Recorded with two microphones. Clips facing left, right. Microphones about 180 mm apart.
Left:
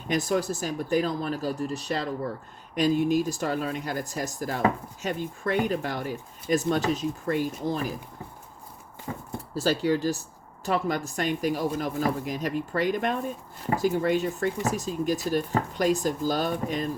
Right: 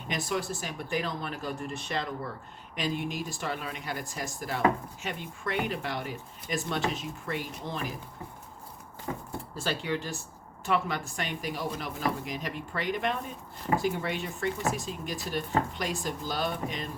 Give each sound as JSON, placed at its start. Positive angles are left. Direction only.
{"t": 0.1, "sound": "speech", "side_deg": 40}
{"t": 9.6, "sound": "speech", "side_deg": 40}